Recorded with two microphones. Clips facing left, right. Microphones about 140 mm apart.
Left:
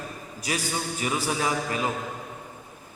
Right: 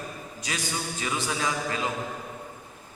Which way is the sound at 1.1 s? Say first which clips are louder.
Left 2 dB; 35° left (ahead or behind).